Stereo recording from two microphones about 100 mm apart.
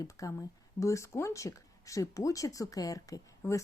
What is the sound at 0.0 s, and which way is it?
Speech, 35° left (ahead or behind).